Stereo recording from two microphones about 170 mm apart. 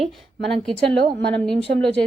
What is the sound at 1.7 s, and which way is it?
Speech, 60° right (ahead or behind).